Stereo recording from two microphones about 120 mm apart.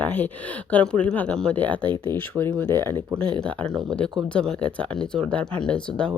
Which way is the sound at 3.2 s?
40° right (ahead or behind).